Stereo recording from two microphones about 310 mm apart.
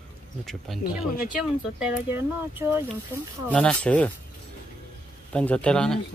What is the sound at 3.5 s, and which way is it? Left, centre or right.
Speech, centre.